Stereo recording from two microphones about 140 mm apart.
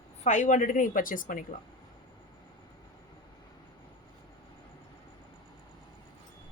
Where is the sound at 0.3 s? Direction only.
60° left (ahead or behind).